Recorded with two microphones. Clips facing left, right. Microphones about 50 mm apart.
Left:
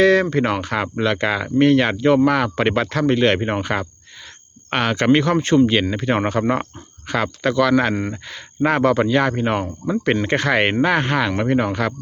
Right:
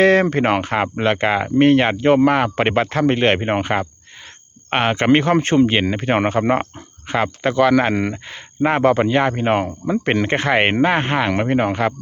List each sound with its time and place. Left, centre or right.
0.0 s speech: right